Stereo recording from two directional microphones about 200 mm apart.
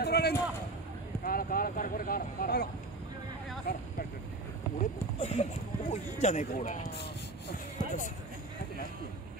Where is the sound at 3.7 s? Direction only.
50° left (ahead or behind).